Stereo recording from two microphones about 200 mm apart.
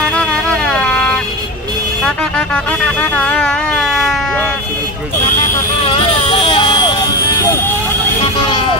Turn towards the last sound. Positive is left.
turn(degrees=25)  # may be behind; listen again after turning